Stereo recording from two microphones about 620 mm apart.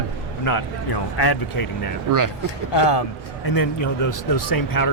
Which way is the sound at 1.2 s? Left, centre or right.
Left.